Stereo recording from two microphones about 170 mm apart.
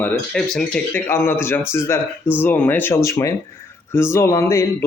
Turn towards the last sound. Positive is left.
turn(degrees=15)  # may be behind; listen again after turning